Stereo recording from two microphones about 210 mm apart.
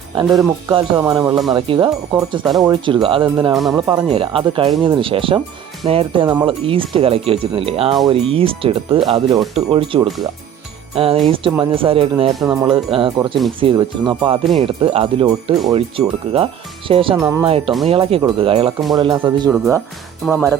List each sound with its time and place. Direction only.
0.2 s speech: 20° right (ahead or behind)
3.5 s speech: centre (ahead or behind)
3.8 s speech: 25° right (ahead or behind)
17.2 s speech: 15° right (ahead or behind)
17.4 s speech: 25° right (ahead or behind)
19.5 s speech: centre (ahead or behind)